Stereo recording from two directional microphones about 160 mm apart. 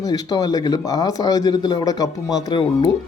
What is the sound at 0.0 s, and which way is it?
Speech, 25° left (ahead or behind).